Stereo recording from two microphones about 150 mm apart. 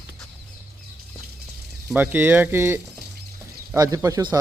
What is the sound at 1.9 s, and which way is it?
Speech, 10° right (ahead or behind).